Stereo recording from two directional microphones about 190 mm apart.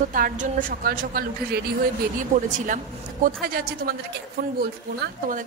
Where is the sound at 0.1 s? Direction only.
45° right (ahead or behind).